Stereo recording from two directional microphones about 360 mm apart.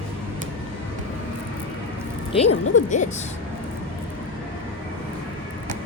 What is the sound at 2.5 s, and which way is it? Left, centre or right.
Speech, left.